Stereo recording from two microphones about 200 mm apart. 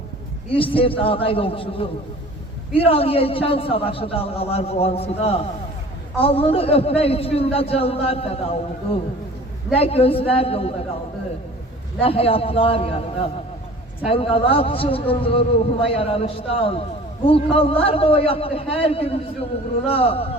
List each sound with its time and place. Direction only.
0.5 s a man's voice: 25° left (ahead or behind)
9.7 s a man's voice: 30° left (ahead or behind)
11.9 s a man's voice: 30° left (ahead or behind)